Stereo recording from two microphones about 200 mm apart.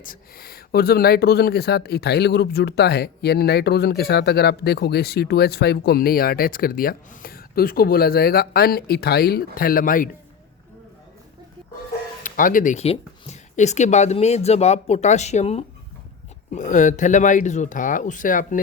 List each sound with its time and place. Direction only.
0.0 s speech: 45° left (ahead or behind)
12.2 s speech: 40° left (ahead or behind)